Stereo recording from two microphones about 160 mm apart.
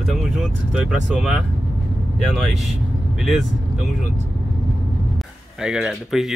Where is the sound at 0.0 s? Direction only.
Centre (ahead or behind).